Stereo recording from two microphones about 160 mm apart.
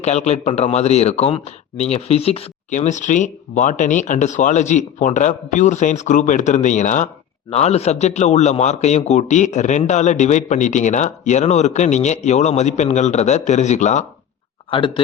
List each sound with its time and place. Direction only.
0.0 s speech: 45° left (ahead or behind)
14.7 s speech: 35° left (ahead or behind)